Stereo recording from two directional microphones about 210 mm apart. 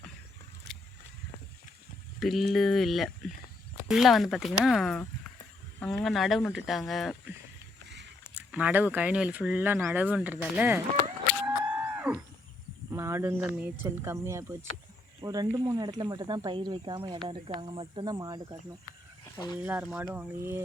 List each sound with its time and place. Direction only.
2.1 s speech: centre (ahead or behind)
8.5 s speech: 10° right (ahead or behind)
11.4 s a sound: 10° right (ahead or behind)
13.8 s speech: 10° right (ahead or behind)
19.2 s a sound: 20° left (ahead or behind)
19.5 s speech: 5° right (ahead or behind)